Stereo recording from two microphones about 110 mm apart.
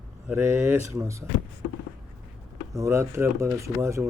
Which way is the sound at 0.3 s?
20° right (ahead or behind).